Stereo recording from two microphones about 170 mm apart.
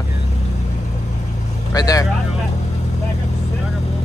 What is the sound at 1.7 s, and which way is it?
Speech, 20° left (ahead or behind).